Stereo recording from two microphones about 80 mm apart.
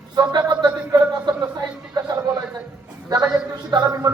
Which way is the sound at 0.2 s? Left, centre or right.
Right.